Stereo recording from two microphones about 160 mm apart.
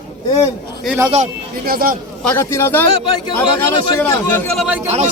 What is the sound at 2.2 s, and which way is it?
Speech, 15° left (ahead or behind).